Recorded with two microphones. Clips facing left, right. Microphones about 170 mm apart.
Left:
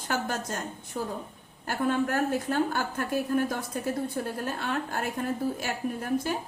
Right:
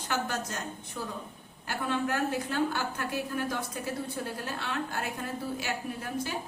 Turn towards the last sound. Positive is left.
turn(degrees=50)  # may be behind; listen again after turning